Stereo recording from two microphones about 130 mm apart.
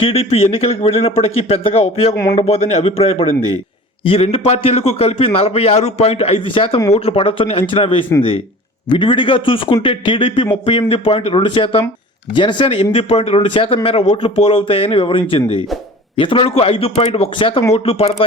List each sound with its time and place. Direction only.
0.0 s a man's voice: 50° left (ahead or behind)